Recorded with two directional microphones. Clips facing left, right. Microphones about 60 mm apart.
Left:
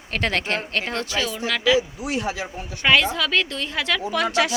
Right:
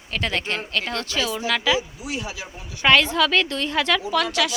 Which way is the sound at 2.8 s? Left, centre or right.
Centre.